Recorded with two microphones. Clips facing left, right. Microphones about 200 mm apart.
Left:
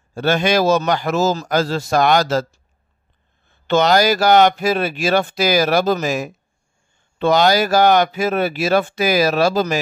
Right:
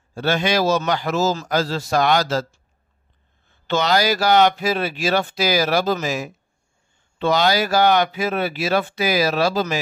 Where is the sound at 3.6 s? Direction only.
50° left (ahead or behind).